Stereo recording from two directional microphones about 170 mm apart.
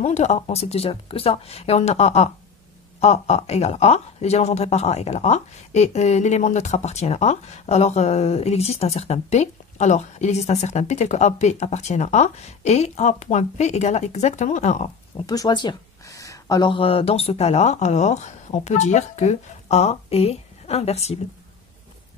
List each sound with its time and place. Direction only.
0.0 s speech: 40° left (ahead or behind)
15.2 s speech: 20° left (ahead or behind); by 21.2 s 40° left (ahead or behind)